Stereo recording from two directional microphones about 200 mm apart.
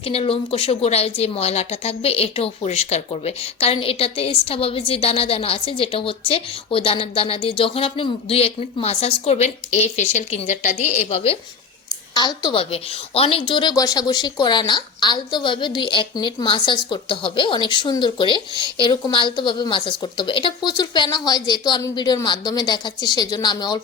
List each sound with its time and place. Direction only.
0.0 s speech: 30° left (ahead or behind)